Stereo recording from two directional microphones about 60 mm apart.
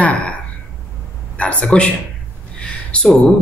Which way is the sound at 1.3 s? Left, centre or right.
Left.